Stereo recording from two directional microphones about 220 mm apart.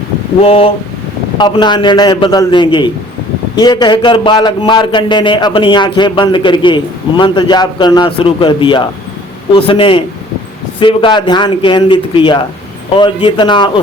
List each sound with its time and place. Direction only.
0.4 s a man's voice: 25° left (ahead or behind)